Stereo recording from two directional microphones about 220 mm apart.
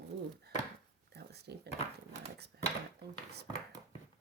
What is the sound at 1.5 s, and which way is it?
Speech, 50° right (ahead or behind).